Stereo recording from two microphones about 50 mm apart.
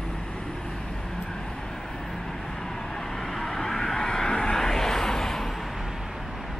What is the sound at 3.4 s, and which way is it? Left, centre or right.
Vehicle, centre.